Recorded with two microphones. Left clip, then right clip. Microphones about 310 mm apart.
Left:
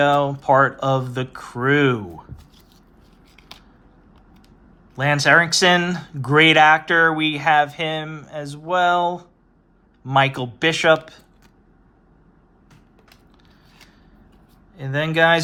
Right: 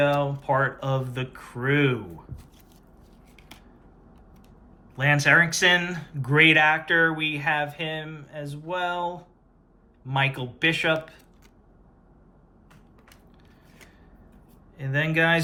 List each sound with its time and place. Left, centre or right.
0.0 s speech: centre
4.9 s speech: centre
10.3 s speech: centre
14.8 s speech: centre